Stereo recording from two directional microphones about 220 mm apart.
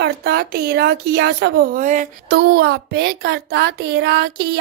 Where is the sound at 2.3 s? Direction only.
50° right (ahead or behind).